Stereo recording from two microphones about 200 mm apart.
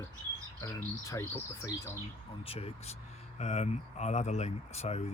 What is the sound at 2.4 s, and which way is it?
Speech, 30° left (ahead or behind).